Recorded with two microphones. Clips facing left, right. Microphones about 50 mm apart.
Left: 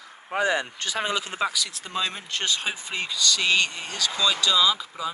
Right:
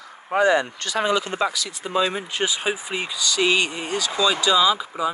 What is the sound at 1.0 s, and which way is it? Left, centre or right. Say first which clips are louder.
Speech: right 5 dB; centre.